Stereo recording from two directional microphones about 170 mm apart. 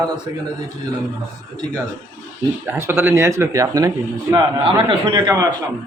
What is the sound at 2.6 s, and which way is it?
A man's voice, 10° right (ahead or behind).